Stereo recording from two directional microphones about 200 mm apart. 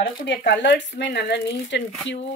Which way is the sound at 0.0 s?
50° left (ahead or behind).